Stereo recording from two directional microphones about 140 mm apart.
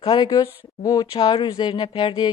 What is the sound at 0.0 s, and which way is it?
Speech, 35° left (ahead or behind).